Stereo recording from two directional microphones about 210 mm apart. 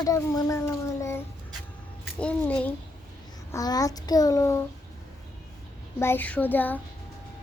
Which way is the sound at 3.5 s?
15° left (ahead or behind).